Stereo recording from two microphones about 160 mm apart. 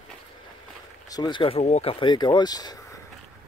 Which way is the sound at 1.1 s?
25° left (ahead or behind).